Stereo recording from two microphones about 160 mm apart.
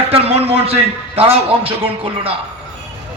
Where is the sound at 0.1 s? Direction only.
40° right (ahead or behind).